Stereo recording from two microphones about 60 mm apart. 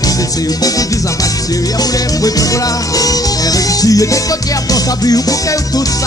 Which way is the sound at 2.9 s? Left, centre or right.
Left.